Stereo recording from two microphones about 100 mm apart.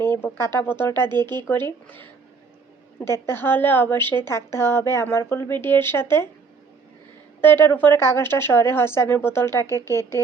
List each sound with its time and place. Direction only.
0.1 s speech: 20° left (ahead or behind)
7.4 s speech: 20° left (ahead or behind)